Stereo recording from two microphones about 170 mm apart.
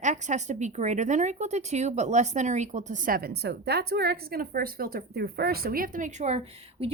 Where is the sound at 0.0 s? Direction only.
45° right (ahead or behind).